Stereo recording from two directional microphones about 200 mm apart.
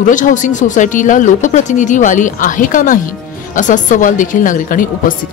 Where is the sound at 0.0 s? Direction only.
40° left (ahead or behind).